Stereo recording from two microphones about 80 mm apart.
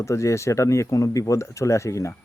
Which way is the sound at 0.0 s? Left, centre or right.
Left.